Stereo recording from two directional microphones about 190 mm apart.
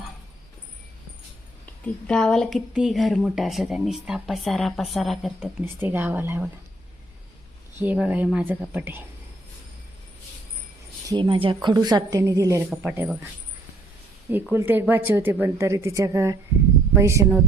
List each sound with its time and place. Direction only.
1.8 s speech: 5° left (ahead or behind)
5.6 s a woman's voice: 10° right (ahead or behind)
7.8 s a woman's voice: 10° right (ahead or behind)
11.1 s a woman's voice: 25° right (ahead or behind); by 13.1 s 10° right (ahead or behind)
14.5 s a woman's voice: 10° right (ahead or behind)